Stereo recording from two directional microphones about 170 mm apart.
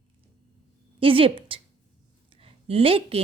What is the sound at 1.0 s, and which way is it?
Speech, 30° right (ahead or behind).